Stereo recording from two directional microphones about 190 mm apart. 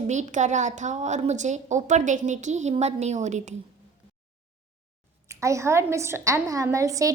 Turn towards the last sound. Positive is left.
turn(degrees=-15)  # may be behind; listen again after turning